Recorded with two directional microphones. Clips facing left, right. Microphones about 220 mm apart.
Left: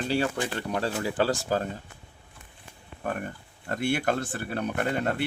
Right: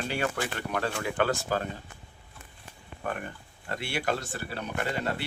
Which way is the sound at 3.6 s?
50° left (ahead or behind).